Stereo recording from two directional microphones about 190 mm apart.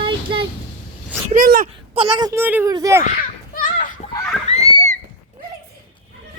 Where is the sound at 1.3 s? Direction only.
45° right (ahead or behind).